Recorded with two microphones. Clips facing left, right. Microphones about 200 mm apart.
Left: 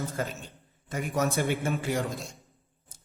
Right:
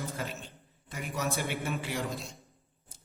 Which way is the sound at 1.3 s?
45° left (ahead or behind).